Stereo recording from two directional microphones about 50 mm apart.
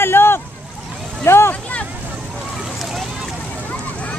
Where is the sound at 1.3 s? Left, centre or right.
Left.